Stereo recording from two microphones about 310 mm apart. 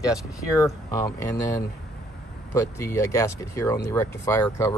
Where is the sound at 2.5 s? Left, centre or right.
Centre.